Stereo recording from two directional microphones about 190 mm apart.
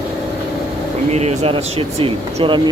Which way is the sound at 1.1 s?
35° right (ahead or behind).